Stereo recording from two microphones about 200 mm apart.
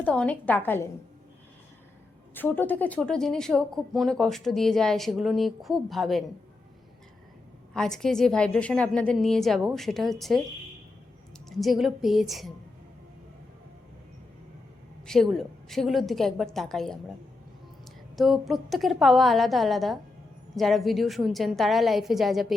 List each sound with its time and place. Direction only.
0.0 s a woman's voice: 5° left (ahead or behind)
2.3 s a woman's voice: 10° left (ahead or behind)
7.7 s a woman's voice: centre (ahead or behind)
11.4 s a woman's voice: centre (ahead or behind)
15.0 s a woman's voice: centre (ahead or behind)
18.2 s a woman's voice: centre (ahead or behind)